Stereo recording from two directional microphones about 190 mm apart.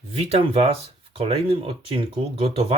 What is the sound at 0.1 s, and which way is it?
Speech, 30° right (ahead or behind).